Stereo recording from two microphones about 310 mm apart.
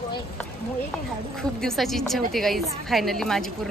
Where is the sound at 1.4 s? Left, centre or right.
Centre.